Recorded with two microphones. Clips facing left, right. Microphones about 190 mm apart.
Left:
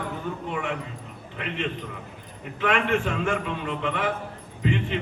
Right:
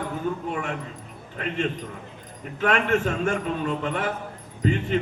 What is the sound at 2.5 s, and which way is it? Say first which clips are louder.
A man's voice: right 1 dB; 45° right (ahead or behind).